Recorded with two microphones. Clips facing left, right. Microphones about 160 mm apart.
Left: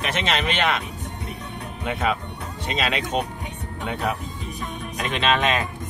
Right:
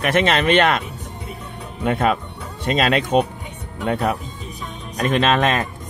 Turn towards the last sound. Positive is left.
turn(degrees=-50)  # may be behind; listen again after turning